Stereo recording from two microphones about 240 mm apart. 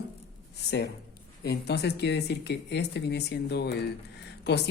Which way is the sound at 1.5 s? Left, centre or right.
Left.